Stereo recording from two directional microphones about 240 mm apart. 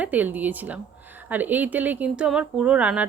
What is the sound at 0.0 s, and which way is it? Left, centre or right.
A woman's voice, centre.